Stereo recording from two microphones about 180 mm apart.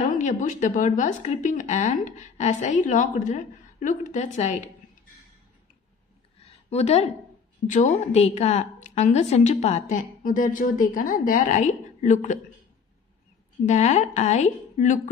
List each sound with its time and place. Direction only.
0.0 s a woman's voice: 45° left (ahead or behind)
6.4 s a sound: 35° left (ahead or behind)
7.6 s a woman's voice: 45° left (ahead or behind)
13.7 s a woman's voice: 40° left (ahead or behind)